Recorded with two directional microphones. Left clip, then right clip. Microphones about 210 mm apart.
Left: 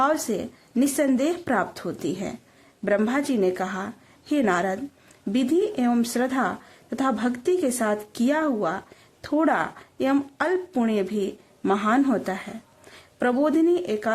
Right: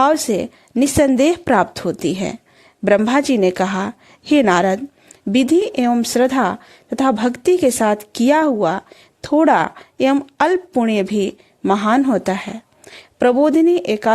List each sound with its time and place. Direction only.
0.0 s speech: 40° right (ahead or behind)